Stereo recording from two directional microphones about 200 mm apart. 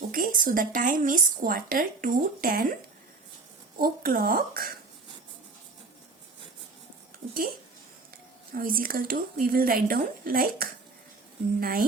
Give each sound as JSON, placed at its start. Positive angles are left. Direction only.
{"t": 0.1, "sound": "speech", "side_deg": -45}
{"t": 3.8, "sound": "speech", "side_deg": -45}
{"t": 8.5, "sound": "speech", "side_deg": -45}